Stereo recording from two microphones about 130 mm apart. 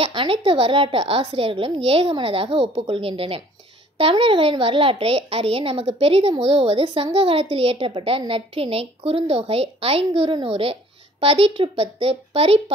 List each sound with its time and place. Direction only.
0.0 s a woman's voice: 45° right (ahead or behind)